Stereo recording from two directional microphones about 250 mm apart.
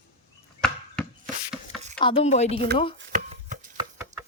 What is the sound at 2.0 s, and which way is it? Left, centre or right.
Speech, left.